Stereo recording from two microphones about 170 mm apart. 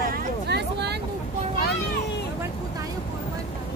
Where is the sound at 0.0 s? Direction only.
70° right (ahead or behind).